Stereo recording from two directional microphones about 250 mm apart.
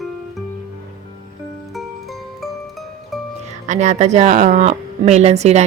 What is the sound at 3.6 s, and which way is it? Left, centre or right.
Speech, right.